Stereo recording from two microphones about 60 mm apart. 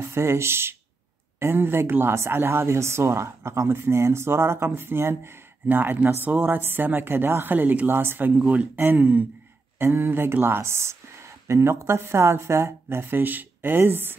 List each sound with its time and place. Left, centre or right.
0.0 s speech: right
8.4 s sigh: right
9.8 s speech: right